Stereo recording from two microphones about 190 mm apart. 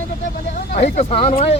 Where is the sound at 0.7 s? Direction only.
35° left (ahead or behind).